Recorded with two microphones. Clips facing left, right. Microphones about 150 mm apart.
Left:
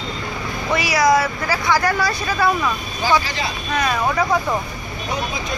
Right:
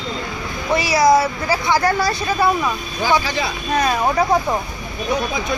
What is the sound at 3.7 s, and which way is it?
Speech, 35° right (ahead or behind).